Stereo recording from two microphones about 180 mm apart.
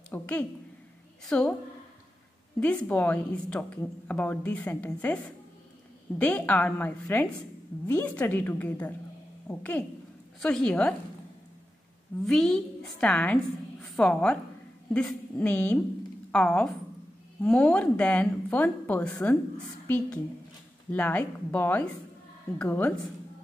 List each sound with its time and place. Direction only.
0.1 s a woman's voice: 5° left (ahead or behind)
2.6 s a woman's voice: 10° left (ahead or behind)
12.3 s a woman's voice: 5° left (ahead or behind)
20.9 s speech: 10° left (ahead or behind)